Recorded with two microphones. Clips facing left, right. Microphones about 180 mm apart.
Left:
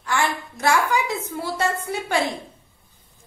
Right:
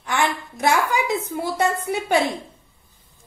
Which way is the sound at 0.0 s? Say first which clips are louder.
Right 1 dB; 20° right (ahead or behind).